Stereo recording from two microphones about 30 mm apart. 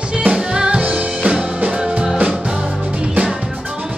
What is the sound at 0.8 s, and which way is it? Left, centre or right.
Music, right.